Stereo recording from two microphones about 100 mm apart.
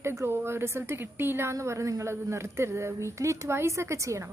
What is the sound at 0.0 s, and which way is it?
A woman's voice, 25° right (ahead or behind).